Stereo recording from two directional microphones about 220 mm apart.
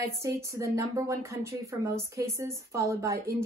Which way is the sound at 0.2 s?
15° right (ahead or behind).